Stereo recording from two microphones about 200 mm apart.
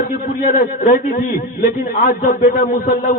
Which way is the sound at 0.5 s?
40° left (ahead or behind).